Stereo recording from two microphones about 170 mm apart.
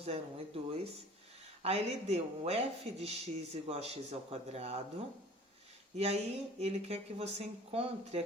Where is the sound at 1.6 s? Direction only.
35° right (ahead or behind).